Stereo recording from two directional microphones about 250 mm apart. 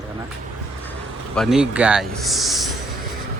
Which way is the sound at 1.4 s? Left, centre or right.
Centre.